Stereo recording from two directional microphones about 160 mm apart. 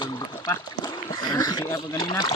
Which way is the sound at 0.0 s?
25° left (ahead or behind).